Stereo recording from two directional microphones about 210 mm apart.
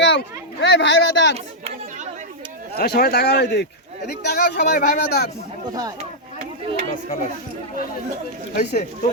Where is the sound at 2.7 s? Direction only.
50° left (ahead or behind).